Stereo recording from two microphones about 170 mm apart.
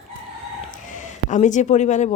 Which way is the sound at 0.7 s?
45° left (ahead or behind).